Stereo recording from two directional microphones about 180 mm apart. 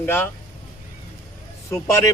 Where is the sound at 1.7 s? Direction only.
15° left (ahead or behind).